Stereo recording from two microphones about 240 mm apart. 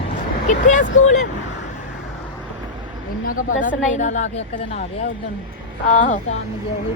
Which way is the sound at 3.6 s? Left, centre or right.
Left.